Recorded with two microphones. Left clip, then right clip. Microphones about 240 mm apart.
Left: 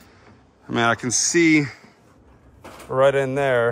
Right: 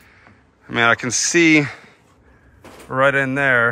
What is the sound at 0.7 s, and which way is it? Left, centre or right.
Speech, centre.